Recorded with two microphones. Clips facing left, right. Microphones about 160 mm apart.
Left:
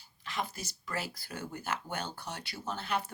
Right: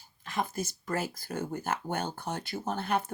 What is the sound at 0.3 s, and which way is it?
Speech, 50° right (ahead or behind).